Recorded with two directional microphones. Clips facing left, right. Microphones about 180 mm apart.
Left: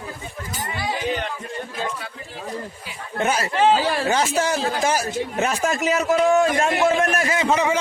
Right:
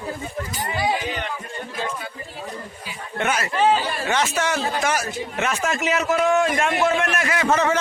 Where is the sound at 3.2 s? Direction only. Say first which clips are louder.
Left 1 dB; 35° left (ahead or behind).